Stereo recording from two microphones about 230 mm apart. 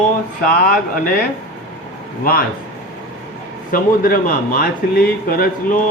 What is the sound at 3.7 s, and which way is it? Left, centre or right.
Speech, left.